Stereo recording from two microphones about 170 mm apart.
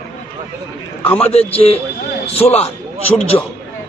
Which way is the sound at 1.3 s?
35° left (ahead or behind).